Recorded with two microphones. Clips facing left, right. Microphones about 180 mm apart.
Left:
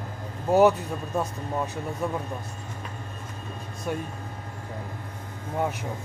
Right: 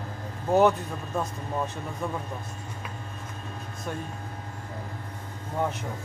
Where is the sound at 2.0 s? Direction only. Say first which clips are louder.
Left 3 dB; 5° left (ahead or behind).